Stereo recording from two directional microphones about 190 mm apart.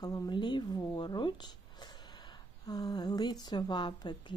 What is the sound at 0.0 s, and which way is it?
Speech, 20° left (ahead or behind).